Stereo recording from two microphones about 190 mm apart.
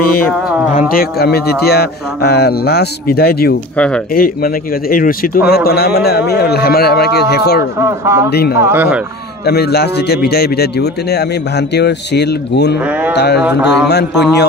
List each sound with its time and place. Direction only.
0.7 s a man's voice: 50° left (ahead or behind)
3.7 s speech: 5° left (ahead or behind)
4.1 s a man's voice: 50° left (ahead or behind)
7.8 s speech: 15° right (ahead or behind)
8.3 s a man's voice: 55° left (ahead or behind)
8.6 s speech: 10° right (ahead or behind)
9.5 s a man's voice: 60° left (ahead or behind)
13.1 s mantra: 60° left (ahead or behind)
13.4 s speech: 10° right (ahead or behind)
13.8 s a man's voice: 60° left (ahead or behind)